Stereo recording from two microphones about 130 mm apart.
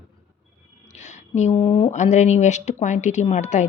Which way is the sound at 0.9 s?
60° left (ahead or behind).